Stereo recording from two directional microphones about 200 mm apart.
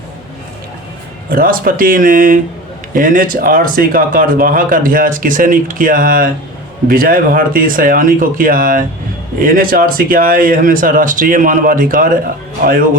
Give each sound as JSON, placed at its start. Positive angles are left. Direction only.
{"t": 1.3, "sound": "speech", "side_deg": -45}